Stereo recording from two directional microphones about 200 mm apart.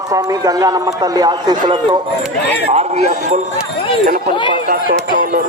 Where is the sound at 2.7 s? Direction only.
35° right (ahead or behind).